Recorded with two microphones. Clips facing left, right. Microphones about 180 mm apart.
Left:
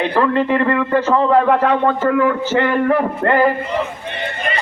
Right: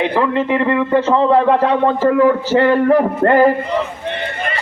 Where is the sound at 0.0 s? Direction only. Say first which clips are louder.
Even; 15° right (ahead or behind); by 3.5 s 35° right (ahead or behind).